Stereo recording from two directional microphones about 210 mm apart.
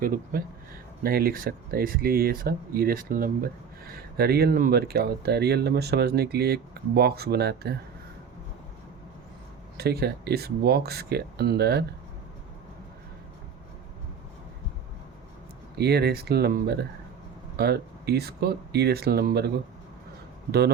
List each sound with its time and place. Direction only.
0.0 s speech: 40° right (ahead or behind)
9.7 s speech: 50° right (ahead or behind)
15.8 s speech: 50° right (ahead or behind)